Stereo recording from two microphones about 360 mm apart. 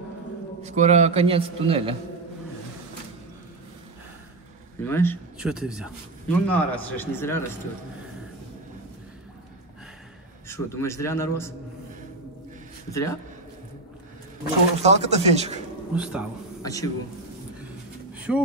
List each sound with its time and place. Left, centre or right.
0.6 s a man's voice: centre
4.8 s a man's voice: centre
10.5 s a man's voice: centre
12.9 s a man's voice: centre
14.8 s a man's voice: centre
15.9 s a man's voice: centre
16.6 s a man's voice: centre
18.3 s a man's voice: centre